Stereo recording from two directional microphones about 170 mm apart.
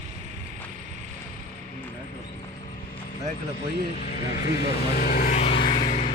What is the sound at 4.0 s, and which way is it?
Speech, 55° left (ahead or behind).